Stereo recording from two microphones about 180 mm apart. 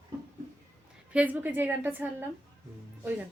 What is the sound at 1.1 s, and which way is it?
A woman's voice, 10° right (ahead or behind).